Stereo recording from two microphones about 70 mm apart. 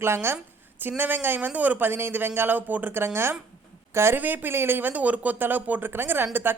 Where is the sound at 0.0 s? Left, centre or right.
Right.